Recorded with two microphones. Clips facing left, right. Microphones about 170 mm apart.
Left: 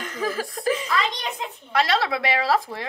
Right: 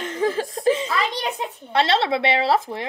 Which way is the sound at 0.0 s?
25° right (ahead or behind).